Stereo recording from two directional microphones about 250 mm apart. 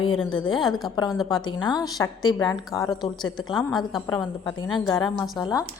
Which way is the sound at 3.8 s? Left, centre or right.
Centre.